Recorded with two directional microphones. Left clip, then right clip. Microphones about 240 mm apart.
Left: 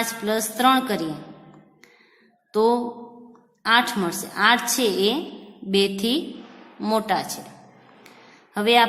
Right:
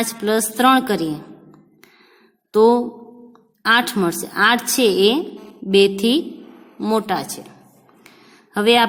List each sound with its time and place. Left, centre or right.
0.0 s a woman's voice: right
2.5 s a woman's voice: right
8.5 s a woman's voice: right